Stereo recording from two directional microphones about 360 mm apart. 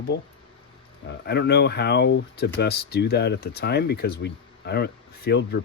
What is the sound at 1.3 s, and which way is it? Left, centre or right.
Speech, left.